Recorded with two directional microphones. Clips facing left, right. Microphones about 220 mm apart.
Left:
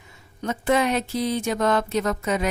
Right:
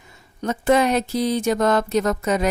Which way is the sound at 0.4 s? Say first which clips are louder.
Right 4 dB; 40° right (ahead or behind).